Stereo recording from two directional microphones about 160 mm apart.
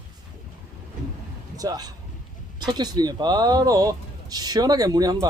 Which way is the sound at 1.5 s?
25° right (ahead or behind).